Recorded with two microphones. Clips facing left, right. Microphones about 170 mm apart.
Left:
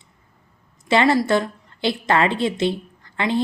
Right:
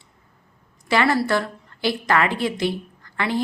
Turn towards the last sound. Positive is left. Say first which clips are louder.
# left 2 dB
turn(degrees=20)  # may be behind; listen again after turning